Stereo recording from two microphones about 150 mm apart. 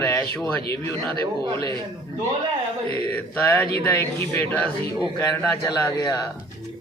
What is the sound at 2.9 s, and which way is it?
Speech, 10° left (ahead or behind).